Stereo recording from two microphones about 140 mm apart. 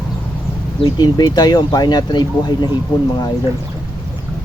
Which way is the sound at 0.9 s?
30° left (ahead or behind).